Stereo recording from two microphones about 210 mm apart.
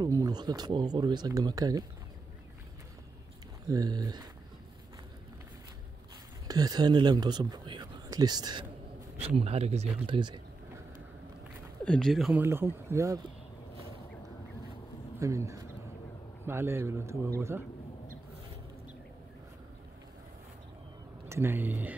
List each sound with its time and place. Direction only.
0.0 s speech: 20° right (ahead or behind)
3.6 s a man's voice: 15° right (ahead or behind)
6.4 s speech: 20° right (ahead or behind)
11.8 s a man's voice: 5° left (ahead or behind); by 13.2 s 15° right (ahead or behind)
15.1 s a man's voice: 15° right (ahead or behind)
21.3 s a man's voice: 10° right (ahead or behind)